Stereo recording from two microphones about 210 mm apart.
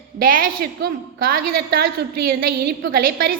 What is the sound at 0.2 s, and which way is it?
A woman's voice, 40° right (ahead or behind).